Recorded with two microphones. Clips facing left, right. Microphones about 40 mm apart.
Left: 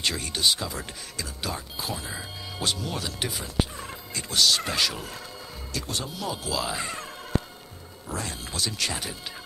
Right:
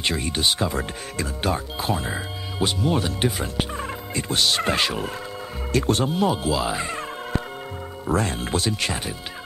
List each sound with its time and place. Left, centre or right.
0.0 s turkey: right
5.7 s turkey: right
6.5 s speech: centre
8.1 s turkey: right